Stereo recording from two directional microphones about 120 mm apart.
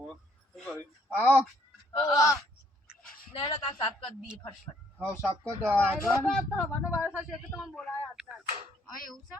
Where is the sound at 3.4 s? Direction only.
40° left (ahead or behind).